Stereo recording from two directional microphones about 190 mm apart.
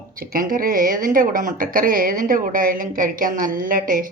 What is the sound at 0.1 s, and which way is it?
Speech, 50° right (ahead or behind).